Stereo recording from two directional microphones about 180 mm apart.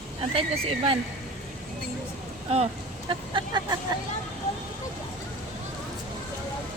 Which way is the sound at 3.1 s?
25° right (ahead or behind).